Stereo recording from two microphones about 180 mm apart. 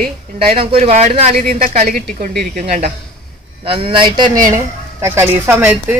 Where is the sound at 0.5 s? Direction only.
30° right (ahead or behind).